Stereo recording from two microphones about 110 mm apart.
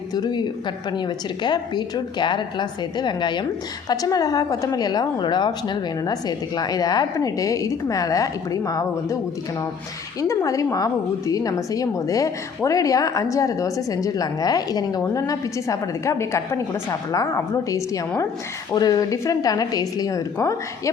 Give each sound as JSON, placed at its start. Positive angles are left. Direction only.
{"t": 0.1, "sound": "a woman's voice", "side_deg": 40}
{"t": 10.2, "sound": "a woman's voice", "side_deg": 30}